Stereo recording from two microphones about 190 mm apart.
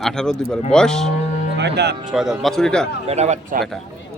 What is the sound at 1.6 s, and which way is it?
Speech, 60° right (ahead or behind).